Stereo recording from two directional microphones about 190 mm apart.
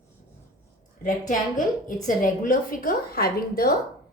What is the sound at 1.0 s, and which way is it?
A woman's voice, 45° left (ahead or behind).